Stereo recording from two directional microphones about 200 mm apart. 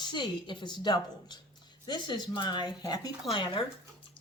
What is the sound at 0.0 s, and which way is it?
Speech, 25° left (ahead or behind).